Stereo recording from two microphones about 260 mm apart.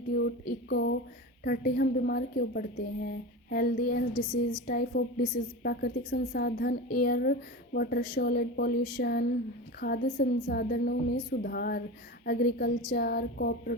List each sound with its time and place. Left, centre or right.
0.1 s a woman's voice: left